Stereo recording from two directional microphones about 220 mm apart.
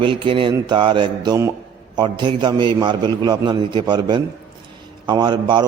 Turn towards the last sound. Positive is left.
turn(degrees=-20)  # may be behind; listen again after turning